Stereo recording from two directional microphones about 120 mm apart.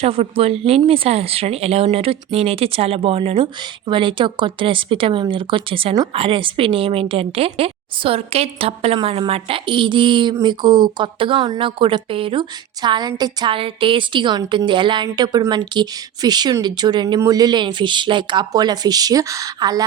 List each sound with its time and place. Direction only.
0.0 s a woman's voice: 55° right (ahead or behind); by 19.8 s 30° right (ahead or behind)